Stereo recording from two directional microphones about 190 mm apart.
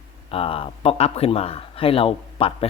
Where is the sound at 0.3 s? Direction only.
30° left (ahead or behind).